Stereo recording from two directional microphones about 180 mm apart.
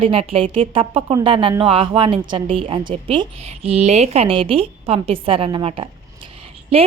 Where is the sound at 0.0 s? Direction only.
30° right (ahead or behind).